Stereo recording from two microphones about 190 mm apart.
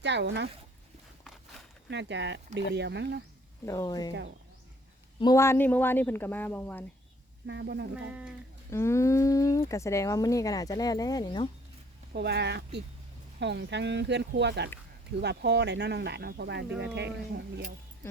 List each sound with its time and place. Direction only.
0.0 s speech: 65° right (ahead or behind)
1.9 s speech: 65° right (ahead or behind)
3.7 s speech: 20° left (ahead or behind)
5.2 s speech: 15° left (ahead or behind)
7.4 s speech: 65° right (ahead or behind)
7.9 s speech: 5° right (ahead or behind)
8.7 s speech: 15° left (ahead or behind)
12.1 s speech: 60° right (ahead or behind)